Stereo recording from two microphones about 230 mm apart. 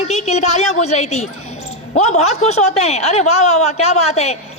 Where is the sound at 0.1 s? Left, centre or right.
Left.